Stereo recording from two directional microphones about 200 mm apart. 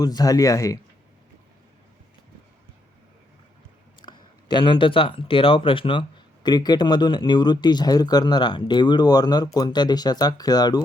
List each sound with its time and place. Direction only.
0.0 s speech: 20° left (ahead or behind)
4.0 s speech: 20° left (ahead or behind)